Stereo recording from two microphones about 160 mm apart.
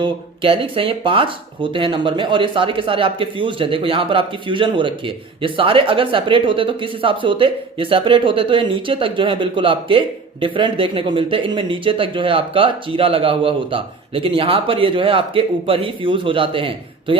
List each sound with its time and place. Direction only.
0.0 s speech: 35° right (ahead or behind)